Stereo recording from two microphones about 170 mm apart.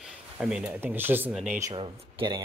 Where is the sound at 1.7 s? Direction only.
30° right (ahead or behind).